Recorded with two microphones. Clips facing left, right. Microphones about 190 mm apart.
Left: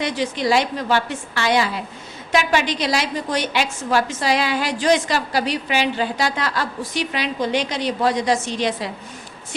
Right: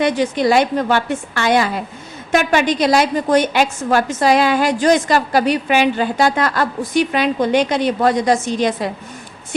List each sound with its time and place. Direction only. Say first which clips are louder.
0.0 s a woman's voice: right 6 dB; 55° right (ahead or behind)